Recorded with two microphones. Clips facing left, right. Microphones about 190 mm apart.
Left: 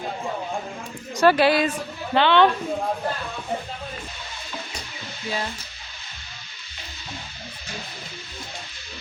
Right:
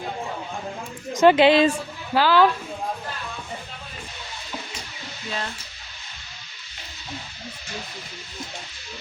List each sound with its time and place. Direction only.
1.2 s a woman's voice: 20° right (ahead or behind)
2.1 s speech: 5° right (ahead or behind)